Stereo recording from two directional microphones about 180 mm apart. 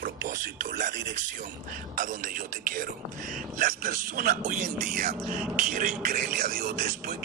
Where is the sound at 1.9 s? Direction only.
50° right (ahead or behind).